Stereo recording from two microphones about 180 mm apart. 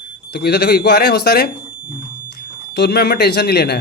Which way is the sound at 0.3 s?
65° left (ahead or behind).